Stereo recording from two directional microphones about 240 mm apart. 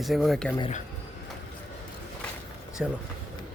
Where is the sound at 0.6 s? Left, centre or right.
Left.